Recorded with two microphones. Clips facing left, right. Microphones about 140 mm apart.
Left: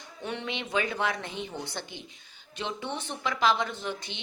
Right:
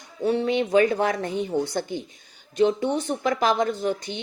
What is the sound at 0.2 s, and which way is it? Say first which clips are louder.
Speech: right 13 dB; 35° right (ahead or behind).